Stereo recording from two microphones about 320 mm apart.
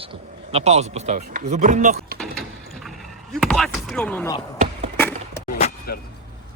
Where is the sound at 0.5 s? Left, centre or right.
Centre.